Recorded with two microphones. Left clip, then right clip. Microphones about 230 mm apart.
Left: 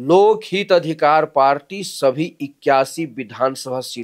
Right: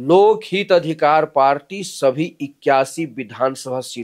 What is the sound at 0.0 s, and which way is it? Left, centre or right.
Speech, right.